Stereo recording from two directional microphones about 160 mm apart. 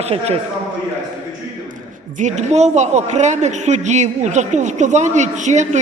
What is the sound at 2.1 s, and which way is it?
Speech, 50° right (ahead or behind).